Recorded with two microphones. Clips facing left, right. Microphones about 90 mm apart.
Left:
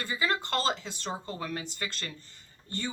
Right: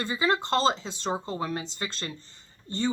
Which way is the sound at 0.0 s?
25° right (ahead or behind).